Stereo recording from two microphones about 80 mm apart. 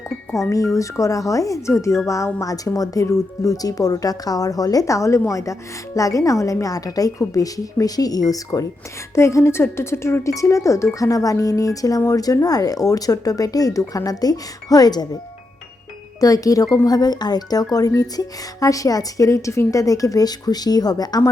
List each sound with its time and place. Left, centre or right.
0.5 s speech: left
9.1 s speech: left
16.2 s speech: left